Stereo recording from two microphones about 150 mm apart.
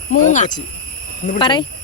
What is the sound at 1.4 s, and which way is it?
Speech, 30° left (ahead or behind).